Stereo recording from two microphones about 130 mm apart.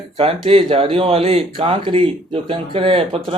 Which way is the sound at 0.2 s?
45° right (ahead or behind).